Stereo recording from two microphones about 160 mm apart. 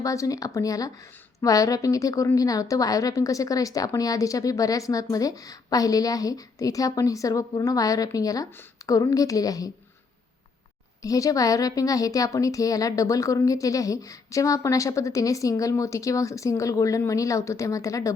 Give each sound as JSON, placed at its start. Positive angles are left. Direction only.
{"t": 0.0, "sound": "a woman's voice", "side_deg": 20}
{"t": 11.0, "sound": "a woman's voice", "side_deg": 20}